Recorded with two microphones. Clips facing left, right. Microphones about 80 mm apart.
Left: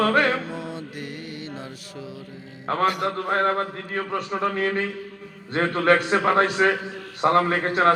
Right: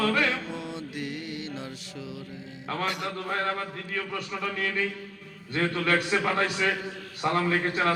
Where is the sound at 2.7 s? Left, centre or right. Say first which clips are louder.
Left 8 dB; left.